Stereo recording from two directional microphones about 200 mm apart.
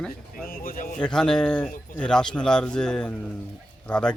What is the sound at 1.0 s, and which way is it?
Speech, 5° left (ahead or behind).